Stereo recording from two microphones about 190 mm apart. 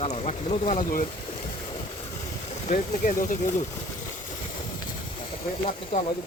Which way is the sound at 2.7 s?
45° left (ahead or behind).